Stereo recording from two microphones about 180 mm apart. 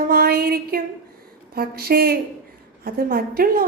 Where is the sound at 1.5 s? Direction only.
60° right (ahead or behind).